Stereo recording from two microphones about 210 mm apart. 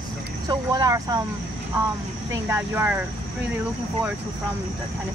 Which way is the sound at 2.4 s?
10° right (ahead or behind).